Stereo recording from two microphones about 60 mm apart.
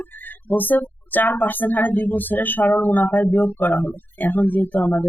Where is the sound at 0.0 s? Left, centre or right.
Left.